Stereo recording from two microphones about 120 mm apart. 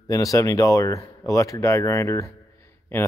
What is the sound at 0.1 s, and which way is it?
Speech, 30° left (ahead or behind).